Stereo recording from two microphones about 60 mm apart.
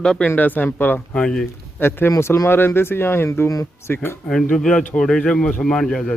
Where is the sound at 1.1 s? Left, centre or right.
Centre.